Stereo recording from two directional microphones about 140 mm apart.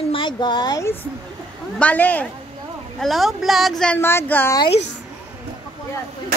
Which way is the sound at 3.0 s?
Centre (ahead or behind).